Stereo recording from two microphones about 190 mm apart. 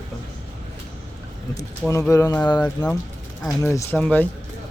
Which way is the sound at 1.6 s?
20° left (ahead or behind).